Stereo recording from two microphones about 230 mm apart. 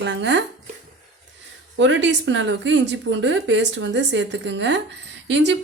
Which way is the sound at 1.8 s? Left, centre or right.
Right.